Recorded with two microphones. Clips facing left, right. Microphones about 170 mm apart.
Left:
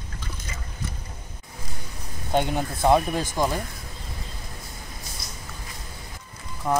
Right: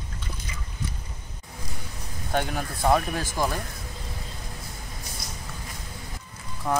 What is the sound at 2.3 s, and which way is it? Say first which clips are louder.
Speech: left 4 dB; 20° left (ahead or behind).